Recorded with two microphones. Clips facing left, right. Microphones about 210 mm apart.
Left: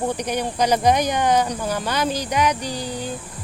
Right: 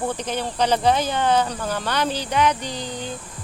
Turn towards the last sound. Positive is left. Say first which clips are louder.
# left 2 dB
turn(degrees=10)  # may be behind; listen again after turning